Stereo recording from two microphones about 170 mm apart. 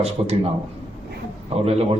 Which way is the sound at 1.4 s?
35° right (ahead or behind).